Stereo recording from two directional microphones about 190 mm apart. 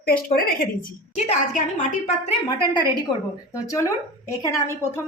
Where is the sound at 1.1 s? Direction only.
35° left (ahead or behind).